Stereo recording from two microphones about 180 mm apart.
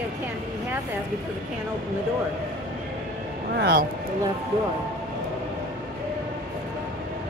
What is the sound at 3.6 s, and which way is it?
Speech, 60° right (ahead or behind).